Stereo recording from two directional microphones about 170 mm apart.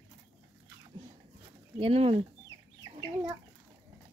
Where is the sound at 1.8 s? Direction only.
35° right (ahead or behind).